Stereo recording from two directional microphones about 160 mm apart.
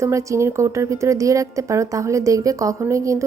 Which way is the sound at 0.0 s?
20° right (ahead or behind).